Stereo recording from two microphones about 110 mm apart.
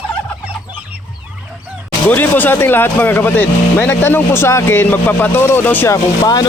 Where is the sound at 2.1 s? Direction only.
15° left (ahead or behind).